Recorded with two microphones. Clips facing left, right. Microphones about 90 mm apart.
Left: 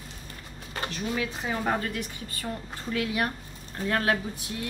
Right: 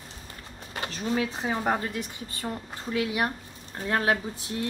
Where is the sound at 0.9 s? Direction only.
30° right (ahead or behind).